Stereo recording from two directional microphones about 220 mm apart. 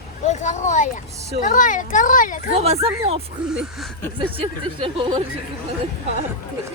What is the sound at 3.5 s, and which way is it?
Speech, 5° right (ahead or behind).